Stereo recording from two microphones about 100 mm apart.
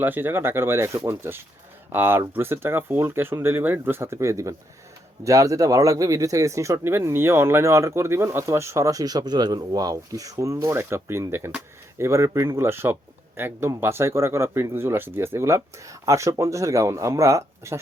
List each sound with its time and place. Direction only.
0.0 s speech: 20° right (ahead or behind)